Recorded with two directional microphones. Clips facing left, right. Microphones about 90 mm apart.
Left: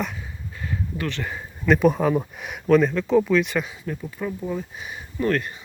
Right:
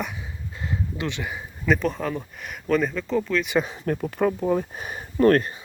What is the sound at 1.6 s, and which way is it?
Speech, 5° left (ahead or behind).